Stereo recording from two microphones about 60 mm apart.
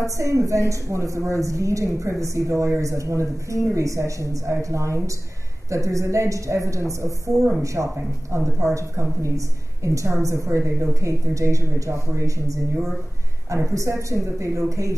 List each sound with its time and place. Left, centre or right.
0.0 s a woman's voice: right